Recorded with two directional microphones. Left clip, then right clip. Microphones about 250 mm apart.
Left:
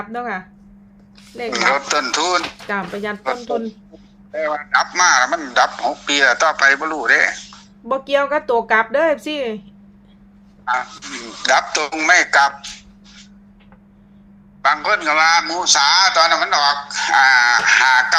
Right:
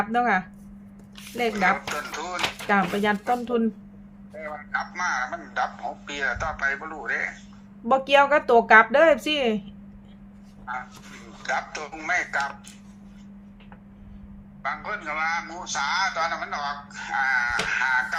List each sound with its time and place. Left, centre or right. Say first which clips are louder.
0.0 s speech: right 3 dB; centre
1.5 s a man's voice: left 10 dB; left
2.6 s speech: right 1 dB; centre
4.4 s a man's voice: left 13 dB; left
7.9 s speech: left 1 dB; centre
10.7 s a man's voice: left 13 dB; left
14.6 s a man's voice: left 14 dB; left